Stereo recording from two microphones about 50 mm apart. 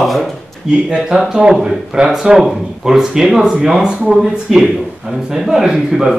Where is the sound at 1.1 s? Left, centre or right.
Right.